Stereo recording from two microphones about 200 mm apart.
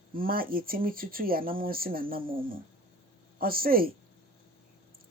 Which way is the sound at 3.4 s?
45° right (ahead or behind).